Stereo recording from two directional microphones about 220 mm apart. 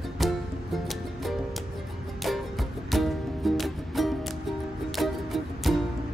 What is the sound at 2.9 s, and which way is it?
Music, centre (ahead or behind).